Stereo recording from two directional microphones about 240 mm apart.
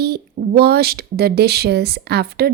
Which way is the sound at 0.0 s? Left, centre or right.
Right.